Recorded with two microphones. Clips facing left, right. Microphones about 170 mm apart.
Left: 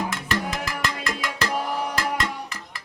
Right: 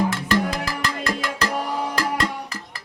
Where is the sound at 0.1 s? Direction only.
35° right (ahead or behind).